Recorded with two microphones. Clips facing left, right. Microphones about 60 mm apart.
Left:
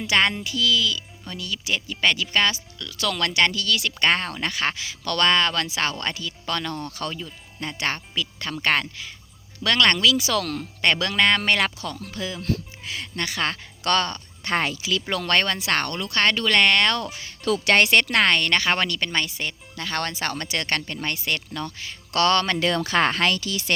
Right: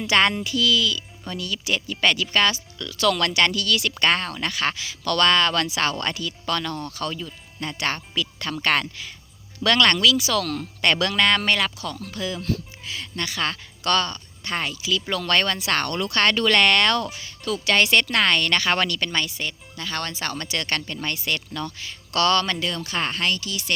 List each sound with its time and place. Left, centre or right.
0.0 s speech: centre
2.7 s speech: centre
3.0 s speech: centre
4.0 s speech: left
7.1 s speech: centre
9.9 s speech: left
10.2 s speech: left
10.4 s speech: centre
11.9 s speech: left
15.1 s speech: left
16.0 s speech: centre
17.4 s speech: left
17.9 s speech: left
22.6 s speech: left